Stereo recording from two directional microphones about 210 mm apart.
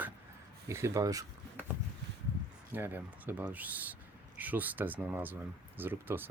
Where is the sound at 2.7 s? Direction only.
10° right (ahead or behind).